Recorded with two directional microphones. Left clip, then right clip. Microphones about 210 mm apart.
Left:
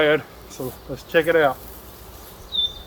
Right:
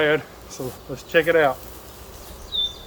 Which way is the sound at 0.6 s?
5° right (ahead or behind).